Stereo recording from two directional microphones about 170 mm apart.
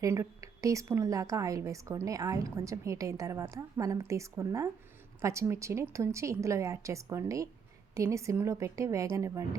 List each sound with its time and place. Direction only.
0.0 s a woman's voice: 20° right (ahead or behind)